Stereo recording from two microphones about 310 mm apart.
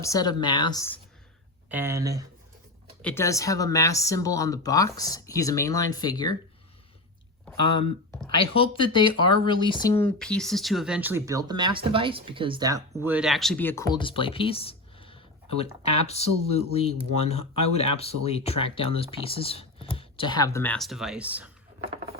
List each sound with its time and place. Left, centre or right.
0.0 s speech: centre
1.7 s speech: centre
3.0 s speech: centre
7.6 s speech: centre